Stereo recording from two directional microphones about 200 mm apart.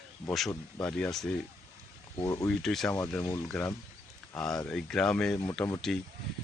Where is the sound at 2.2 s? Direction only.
15° left (ahead or behind).